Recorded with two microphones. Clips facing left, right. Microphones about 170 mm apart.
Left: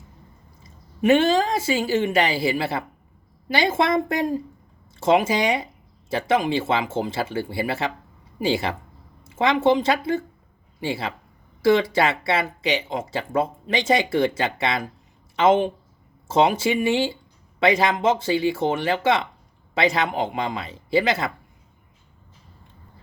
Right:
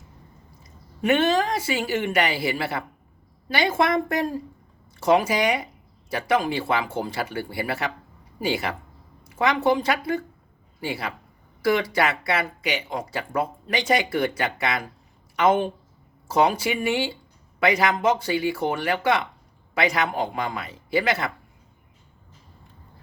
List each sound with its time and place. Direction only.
0.6 s a man's voice: 25° left (ahead or behind)